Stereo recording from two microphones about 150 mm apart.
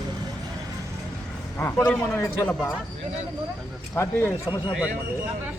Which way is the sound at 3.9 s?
15° left (ahead or behind).